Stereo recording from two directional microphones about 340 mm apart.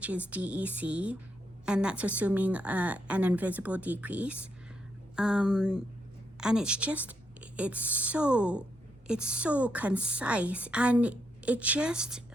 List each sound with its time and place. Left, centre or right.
0.3 s a woman's voice: centre